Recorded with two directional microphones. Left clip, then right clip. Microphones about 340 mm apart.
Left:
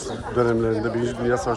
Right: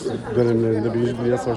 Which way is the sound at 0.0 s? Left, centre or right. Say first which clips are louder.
Right 2 dB; centre.